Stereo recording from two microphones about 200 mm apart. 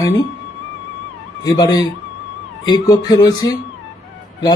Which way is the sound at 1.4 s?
20° left (ahead or behind).